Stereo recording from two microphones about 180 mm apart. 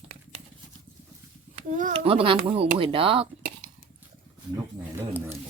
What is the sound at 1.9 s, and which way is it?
A child's voice, 30° right (ahead or behind).